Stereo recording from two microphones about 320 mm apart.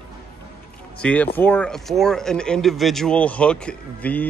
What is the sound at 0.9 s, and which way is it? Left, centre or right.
Speech, centre.